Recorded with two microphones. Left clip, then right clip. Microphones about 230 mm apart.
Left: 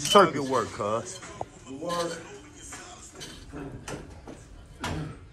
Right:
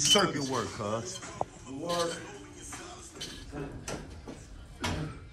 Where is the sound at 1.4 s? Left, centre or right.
Left.